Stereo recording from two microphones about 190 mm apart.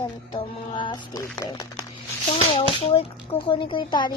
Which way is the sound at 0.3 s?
25° left (ahead or behind).